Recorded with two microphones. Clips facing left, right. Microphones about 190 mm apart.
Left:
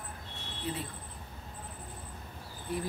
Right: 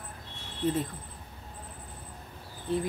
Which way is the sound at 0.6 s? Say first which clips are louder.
Right 9 dB; 45° right (ahead or behind).